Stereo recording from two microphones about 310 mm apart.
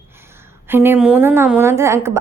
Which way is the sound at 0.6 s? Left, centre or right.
Centre.